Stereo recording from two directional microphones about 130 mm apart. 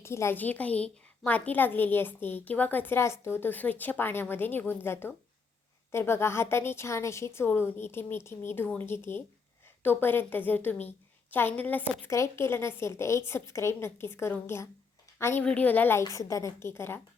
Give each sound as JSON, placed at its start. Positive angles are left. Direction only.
{"t": 0.0, "sound": "a woman's voice", "side_deg": 20}